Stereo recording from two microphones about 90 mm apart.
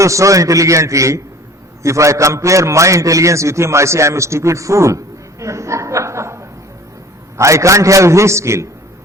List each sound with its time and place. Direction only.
0.0 s a man's voice: 35° right (ahead or behind)
5.4 s a sound: 35° right (ahead or behind)
7.3 s a man's voice: 35° right (ahead or behind)